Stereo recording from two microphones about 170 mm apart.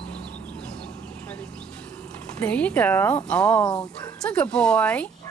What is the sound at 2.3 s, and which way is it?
Speech, 5° left (ahead or behind).